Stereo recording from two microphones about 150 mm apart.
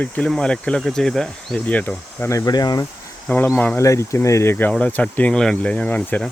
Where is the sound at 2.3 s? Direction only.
25° left (ahead or behind).